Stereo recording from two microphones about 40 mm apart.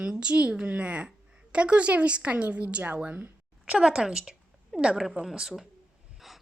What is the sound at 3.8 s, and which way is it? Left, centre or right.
Speech, centre.